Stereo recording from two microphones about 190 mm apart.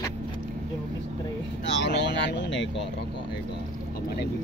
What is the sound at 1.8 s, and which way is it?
Speech, 65° left (ahead or behind).